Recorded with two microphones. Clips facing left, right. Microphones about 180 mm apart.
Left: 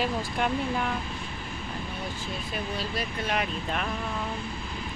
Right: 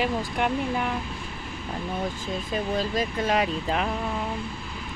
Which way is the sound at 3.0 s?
90° right.